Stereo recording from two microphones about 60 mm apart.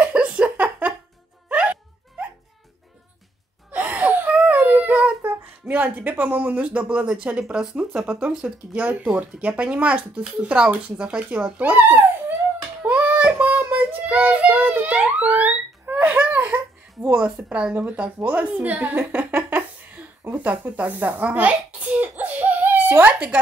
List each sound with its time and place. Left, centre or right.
0.1 s a sound: centre
1.5 s music: right
3.7 s whimper: right
4.4 s a sound: right
6.3 s speech: right
11.7 s dog: right
12.8 s child singing: right
14.1 s a child's voice: right
20.2 s a sound: right